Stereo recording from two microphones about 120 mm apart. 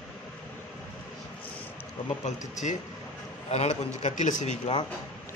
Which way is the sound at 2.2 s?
75° left (ahead or behind).